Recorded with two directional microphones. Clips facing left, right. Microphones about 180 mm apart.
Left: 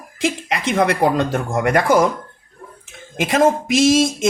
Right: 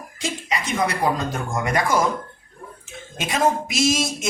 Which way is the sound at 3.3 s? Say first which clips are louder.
Left 6 dB; 90° left.